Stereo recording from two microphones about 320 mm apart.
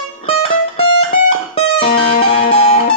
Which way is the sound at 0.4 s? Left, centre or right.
Centre.